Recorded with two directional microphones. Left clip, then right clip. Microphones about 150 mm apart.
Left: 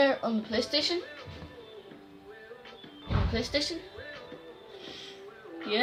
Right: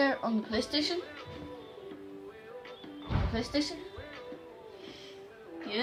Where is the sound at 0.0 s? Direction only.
Centre (ahead or behind).